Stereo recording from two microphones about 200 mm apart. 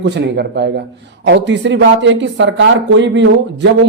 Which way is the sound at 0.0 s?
55° right (ahead or behind).